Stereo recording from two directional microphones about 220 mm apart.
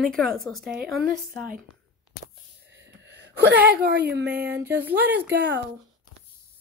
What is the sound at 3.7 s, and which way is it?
Speech, 45° right (ahead or behind).